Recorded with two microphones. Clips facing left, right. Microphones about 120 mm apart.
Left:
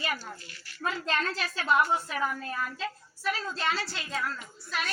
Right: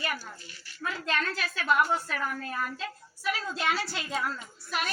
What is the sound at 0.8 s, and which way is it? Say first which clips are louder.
A woman's voice: left 1 dB; 35° left (ahead or behind).